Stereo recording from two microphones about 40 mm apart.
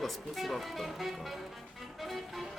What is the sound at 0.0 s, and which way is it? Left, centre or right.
Speech, centre.